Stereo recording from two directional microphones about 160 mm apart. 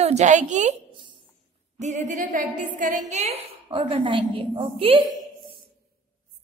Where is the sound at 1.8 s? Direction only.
50° right (ahead or behind); by 5.1 s 35° right (ahead or behind).